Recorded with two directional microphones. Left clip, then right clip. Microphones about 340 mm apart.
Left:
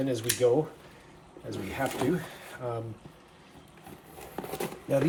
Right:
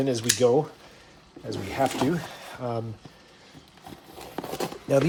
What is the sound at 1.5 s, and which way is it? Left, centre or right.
Speech, right.